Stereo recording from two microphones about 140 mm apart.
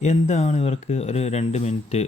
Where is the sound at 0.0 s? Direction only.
55° left (ahead or behind).